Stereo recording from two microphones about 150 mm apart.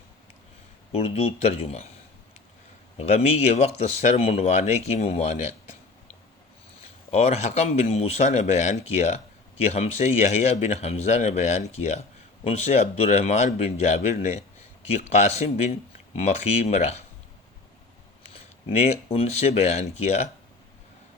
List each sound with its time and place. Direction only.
0.9 s speech: 45° left (ahead or behind)
3.0 s speech: 45° left (ahead or behind)
7.1 s speech: 45° left (ahead or behind)
18.3 s speech: 45° left (ahead or behind)